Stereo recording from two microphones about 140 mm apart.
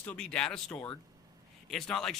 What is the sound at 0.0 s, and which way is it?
Speech, 10° left (ahead or behind).